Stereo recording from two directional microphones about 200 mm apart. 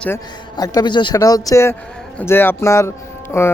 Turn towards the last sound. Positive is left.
turn(degrees=10)  # may be behind; listen again after turning